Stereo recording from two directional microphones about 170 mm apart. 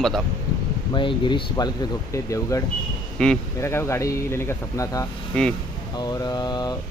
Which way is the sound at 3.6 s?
15° left (ahead or behind).